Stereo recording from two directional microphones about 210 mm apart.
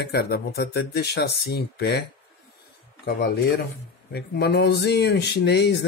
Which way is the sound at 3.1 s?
50° left (ahead or behind).